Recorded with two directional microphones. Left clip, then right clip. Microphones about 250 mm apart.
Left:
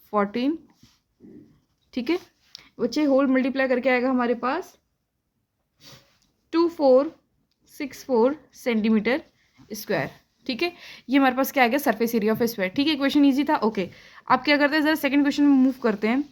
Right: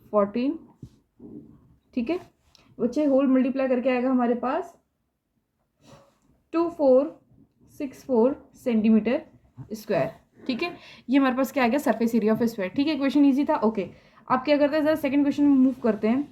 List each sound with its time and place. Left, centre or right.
0.1 s a woman's voice: left
1.9 s a woman's voice: left
6.5 s a woman's voice: left